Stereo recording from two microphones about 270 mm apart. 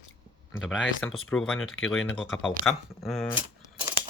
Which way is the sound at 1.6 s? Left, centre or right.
Left.